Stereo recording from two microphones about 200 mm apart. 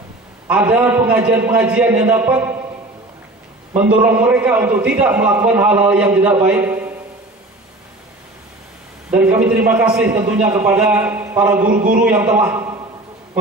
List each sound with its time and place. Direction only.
0.5 s a man's voice: 5° right (ahead or behind)
3.7 s a man's voice: 10° right (ahead or behind)
9.1 s a man's voice: 10° right (ahead or behind)
11.7 s a man's voice: 45° right (ahead or behind)
12.0 s a man's voice: 10° right (ahead or behind)